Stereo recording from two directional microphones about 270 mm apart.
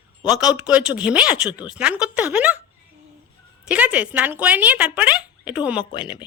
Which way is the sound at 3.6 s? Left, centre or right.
Centre.